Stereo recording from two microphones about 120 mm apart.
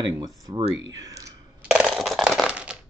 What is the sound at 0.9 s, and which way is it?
Speech, 30° right (ahead or behind).